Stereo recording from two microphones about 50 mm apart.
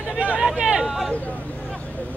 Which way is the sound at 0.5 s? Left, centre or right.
Centre.